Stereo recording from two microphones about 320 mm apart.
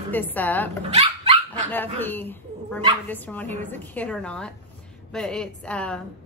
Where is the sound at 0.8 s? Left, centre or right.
Centre.